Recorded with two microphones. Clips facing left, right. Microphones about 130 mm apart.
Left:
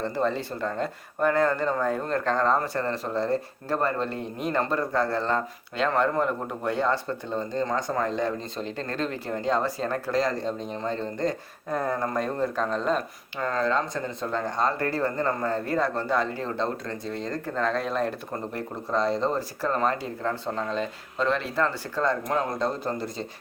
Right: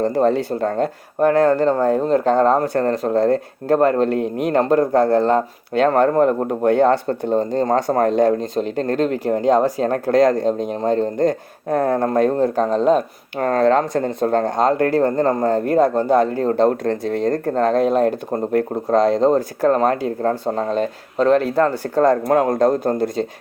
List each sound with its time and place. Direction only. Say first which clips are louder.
0.0 s speech: right 10 dB; 45° right (ahead or behind)
1.7 s speech: right 9 dB; 30° right (ahead or behind)
2.4 s speech: right 9 dB; 50° right (ahead or behind)
12.5 s speech: right 10 dB; 40° right (ahead or behind)
13.4 s speech: right 10 dB; 60° right (ahead or behind)